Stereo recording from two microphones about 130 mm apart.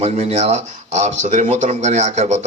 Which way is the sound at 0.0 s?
60° right (ahead or behind).